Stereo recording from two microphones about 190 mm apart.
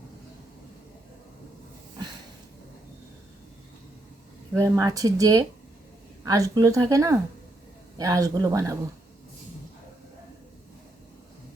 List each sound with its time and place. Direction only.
4.5 s speech: 20° right (ahead or behind)